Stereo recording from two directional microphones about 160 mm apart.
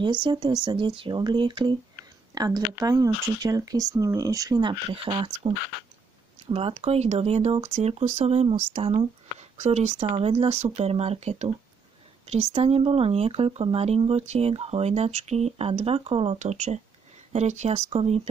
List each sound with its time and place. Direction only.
0.0 s speech: 30° right (ahead or behind)
6.5 s speech: 40° right (ahead or behind)